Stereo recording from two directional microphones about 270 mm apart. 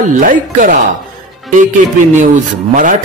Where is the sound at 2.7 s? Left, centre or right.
Right.